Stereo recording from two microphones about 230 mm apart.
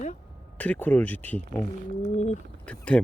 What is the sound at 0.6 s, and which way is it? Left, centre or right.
Speech, centre.